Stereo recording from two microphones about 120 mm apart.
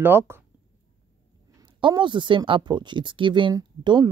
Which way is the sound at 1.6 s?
40° right (ahead or behind).